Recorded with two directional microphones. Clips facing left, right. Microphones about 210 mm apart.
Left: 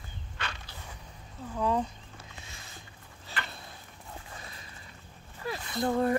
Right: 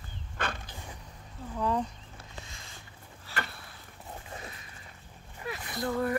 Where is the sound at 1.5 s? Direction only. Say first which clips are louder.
Left 1 dB; 5° left (ahead or behind).